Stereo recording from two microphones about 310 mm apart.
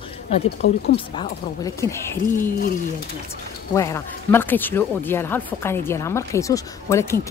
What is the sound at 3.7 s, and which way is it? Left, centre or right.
Speech, centre.